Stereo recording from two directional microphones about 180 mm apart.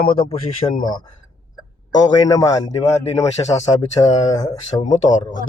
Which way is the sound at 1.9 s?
20° left (ahead or behind).